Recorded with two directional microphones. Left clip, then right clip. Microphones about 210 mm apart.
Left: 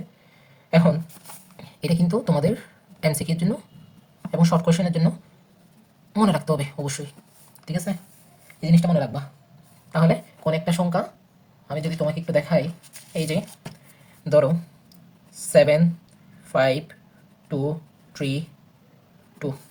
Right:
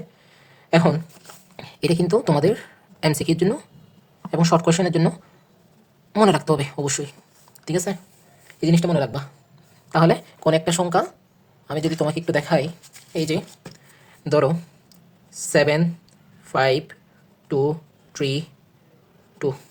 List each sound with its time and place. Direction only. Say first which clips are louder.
0.7 s speech: right 2 dB; 40° right (ahead or behind)
6.1 s speech: right 5 dB; 35° right (ahead or behind)
7.6 s speech: right 6 dB; 50° right (ahead or behind)
9.9 s speech: right 5 dB; 40° right (ahead or behind)
13.1 s speech: right 3 dB; 30° right (ahead or behind)
18.1 s a woman's voice: right 4 dB; 35° right (ahead or behind)